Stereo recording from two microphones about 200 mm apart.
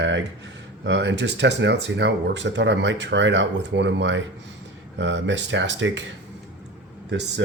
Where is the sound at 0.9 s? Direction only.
60° right (ahead or behind).